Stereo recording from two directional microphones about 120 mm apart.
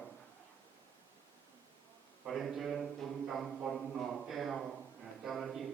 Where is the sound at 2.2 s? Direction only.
Centre (ahead or behind).